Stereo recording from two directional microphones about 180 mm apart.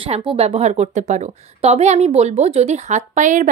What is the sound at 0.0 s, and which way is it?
A woman's voice, 30° right (ahead or behind).